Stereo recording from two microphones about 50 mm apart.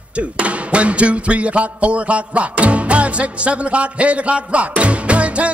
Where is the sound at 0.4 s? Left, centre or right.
Right.